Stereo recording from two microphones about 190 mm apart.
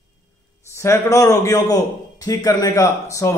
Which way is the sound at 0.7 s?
15° left (ahead or behind).